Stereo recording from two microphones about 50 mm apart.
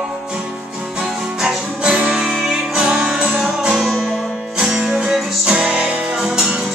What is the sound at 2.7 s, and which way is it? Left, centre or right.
Music, right.